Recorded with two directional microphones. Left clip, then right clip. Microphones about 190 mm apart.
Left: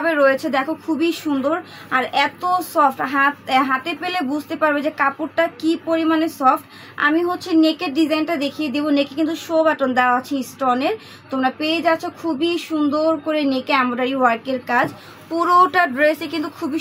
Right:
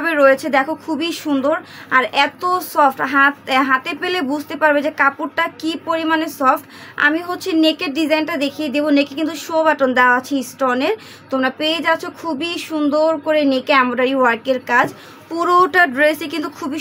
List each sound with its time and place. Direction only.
0.0 s speech: 45° right (ahead or behind)